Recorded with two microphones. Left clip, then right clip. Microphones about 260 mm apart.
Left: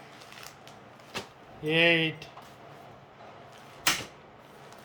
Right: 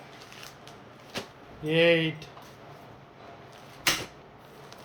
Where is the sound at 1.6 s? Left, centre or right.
Centre.